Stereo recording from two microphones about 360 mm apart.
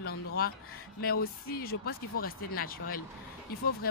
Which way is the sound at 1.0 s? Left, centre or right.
Left.